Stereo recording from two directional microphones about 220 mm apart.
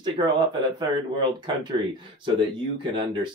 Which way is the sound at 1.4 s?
20° right (ahead or behind).